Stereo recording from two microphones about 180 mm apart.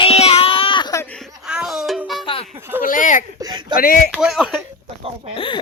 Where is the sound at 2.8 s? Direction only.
45° left (ahead or behind).